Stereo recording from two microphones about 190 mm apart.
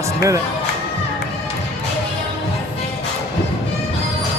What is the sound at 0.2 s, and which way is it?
Speech, 15° right (ahead or behind).